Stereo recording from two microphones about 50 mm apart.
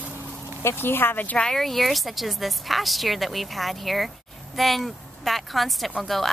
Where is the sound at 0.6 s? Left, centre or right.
Left.